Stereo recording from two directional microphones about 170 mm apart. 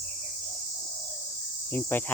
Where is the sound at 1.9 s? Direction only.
10° left (ahead or behind).